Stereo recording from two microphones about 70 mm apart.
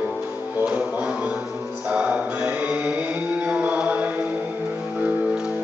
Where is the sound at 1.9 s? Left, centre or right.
Centre.